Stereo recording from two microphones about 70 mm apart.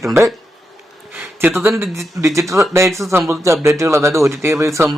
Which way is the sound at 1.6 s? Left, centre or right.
Right.